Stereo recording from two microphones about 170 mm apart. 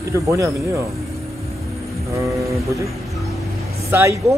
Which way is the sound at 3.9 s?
15° right (ahead or behind).